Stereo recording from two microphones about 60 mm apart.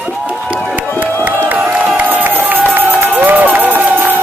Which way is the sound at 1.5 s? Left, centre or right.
Right.